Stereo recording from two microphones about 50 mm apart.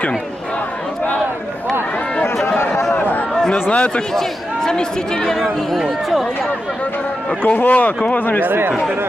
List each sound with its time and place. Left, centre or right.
2.9 s a sound: left
3.5 s speech: left
4.1 s speech: centre
7.4 s speech: left
8.4 s speech: right